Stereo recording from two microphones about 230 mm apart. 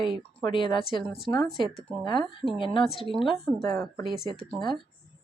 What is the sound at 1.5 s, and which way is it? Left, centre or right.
A woman's voice, left.